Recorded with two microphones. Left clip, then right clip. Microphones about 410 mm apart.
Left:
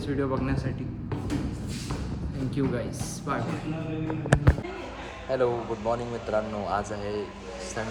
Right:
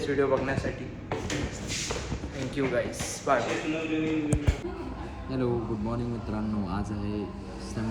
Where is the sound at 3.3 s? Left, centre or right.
Centre.